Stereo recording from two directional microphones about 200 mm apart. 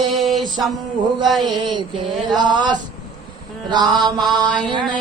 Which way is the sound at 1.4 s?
25° right (ahead or behind).